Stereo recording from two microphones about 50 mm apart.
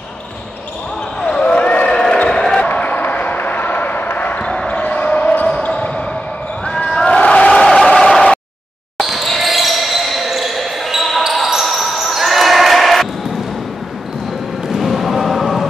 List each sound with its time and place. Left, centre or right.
1.2 s basketball bounce: centre
2.6 s a sound: left
4.4 s basketball bounce: centre
4.7 s basketball bounce: left
6.6 s crowd: centre
7.6 s a sound: centre
8.9 s basketball bounce: centre
14.8 s music: centre